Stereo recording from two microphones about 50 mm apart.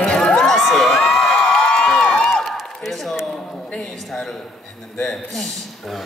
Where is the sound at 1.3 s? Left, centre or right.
Centre.